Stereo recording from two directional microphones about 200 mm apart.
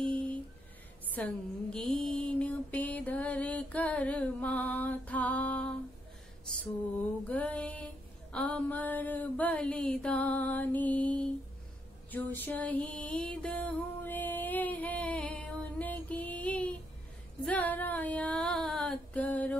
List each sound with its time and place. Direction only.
0.0 s a sound: 5° left (ahead or behind)
2.0 s mantra: 5° left (ahead or behind)
6.6 s female singing: 10° left (ahead or behind)
10.8 s music: 10° left (ahead or behind)
17.5 s female singing: 5° left (ahead or behind)